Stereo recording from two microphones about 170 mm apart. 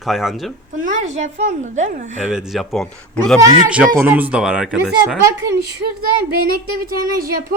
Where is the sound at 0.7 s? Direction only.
45° right (ahead or behind).